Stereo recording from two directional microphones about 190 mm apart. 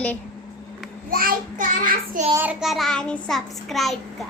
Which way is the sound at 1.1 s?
50° right (ahead or behind).